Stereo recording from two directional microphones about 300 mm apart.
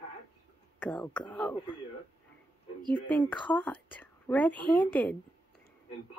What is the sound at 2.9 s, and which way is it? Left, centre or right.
Speech, centre.